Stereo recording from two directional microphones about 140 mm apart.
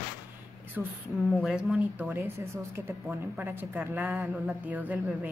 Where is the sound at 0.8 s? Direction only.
10° right (ahead or behind).